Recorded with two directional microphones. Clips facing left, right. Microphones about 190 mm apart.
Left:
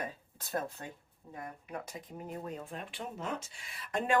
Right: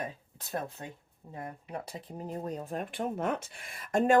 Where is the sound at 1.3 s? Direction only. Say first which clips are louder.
Right 3 dB; 30° right (ahead or behind).